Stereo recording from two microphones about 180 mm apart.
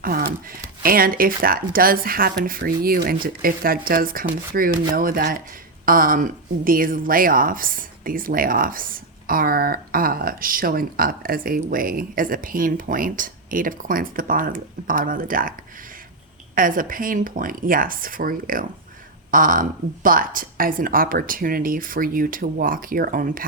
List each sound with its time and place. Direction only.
0.0 s a sound: 55° right (ahead or behind)
0.8 s speech: 55° right (ahead or behind)
16.6 s speech: 50° right (ahead or behind)